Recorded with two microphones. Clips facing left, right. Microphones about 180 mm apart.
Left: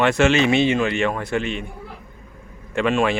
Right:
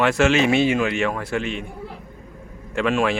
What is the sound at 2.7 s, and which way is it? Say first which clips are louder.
Speech: left 1 dB; centre (ahead or behind).